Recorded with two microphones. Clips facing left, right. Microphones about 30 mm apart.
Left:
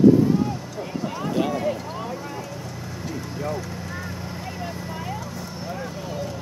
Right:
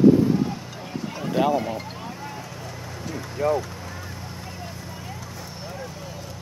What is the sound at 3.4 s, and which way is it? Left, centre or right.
Speech, centre.